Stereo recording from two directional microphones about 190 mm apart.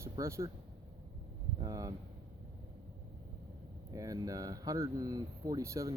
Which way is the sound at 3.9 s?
15° right (ahead or behind).